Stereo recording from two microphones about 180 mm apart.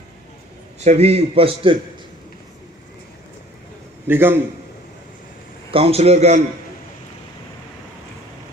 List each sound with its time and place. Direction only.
0.9 s a man's voice: 35° right (ahead or behind)
4.0 s a man's voice: 10° right (ahead or behind)
5.7 s a man's voice: 35° right (ahead or behind)